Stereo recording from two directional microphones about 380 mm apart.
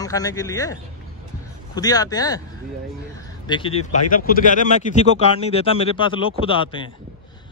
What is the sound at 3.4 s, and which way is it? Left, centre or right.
Speech, centre.